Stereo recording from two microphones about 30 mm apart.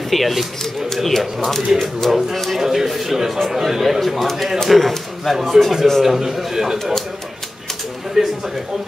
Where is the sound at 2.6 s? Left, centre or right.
Centre.